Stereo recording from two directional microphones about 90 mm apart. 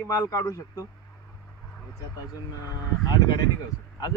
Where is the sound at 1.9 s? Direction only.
40° left (ahead or behind).